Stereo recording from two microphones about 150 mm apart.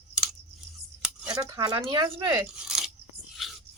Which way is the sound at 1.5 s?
30° right (ahead or behind).